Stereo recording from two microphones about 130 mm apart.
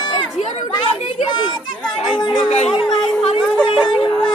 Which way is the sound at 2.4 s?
55° left (ahead or behind).